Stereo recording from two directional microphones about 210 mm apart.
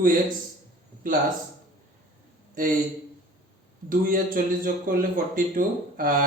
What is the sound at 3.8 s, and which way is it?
A man's voice, 40° right (ahead or behind).